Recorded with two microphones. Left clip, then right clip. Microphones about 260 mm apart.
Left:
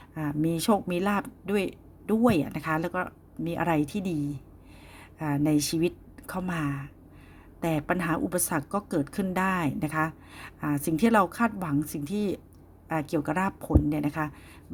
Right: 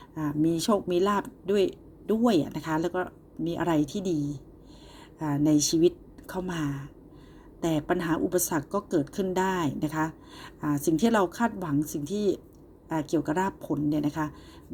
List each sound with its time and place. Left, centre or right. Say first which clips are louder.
0.1 s speech: right 2 dB; left
2.4 s speech: even; left
2.6 s speech: even; left
5.5 s speech: right 5 dB; left
13.7 s speech: left 1 dB; left
14.0 s speech: even; left